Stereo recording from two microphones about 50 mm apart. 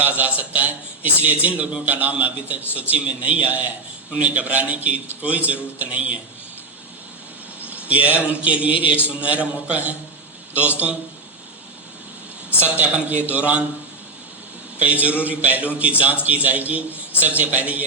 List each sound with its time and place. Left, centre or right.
0.0 s a man's voice: right
7.9 s a man's voice: right
12.5 s a man's voice: right
15.0 s a man's voice: right